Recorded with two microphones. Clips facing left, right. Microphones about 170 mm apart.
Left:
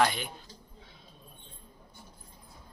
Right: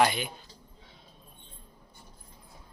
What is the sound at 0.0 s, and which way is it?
Speech, 5° right (ahead or behind).